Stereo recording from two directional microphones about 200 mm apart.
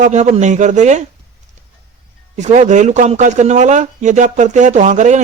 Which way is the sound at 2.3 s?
35° right (ahead or behind).